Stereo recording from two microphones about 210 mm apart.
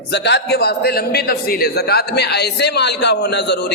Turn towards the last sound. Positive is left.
turn(degrees=55)  # may be behind; listen again after turning